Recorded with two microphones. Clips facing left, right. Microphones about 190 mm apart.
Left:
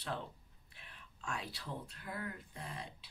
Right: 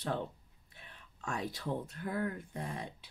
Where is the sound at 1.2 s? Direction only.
45° right (ahead or behind).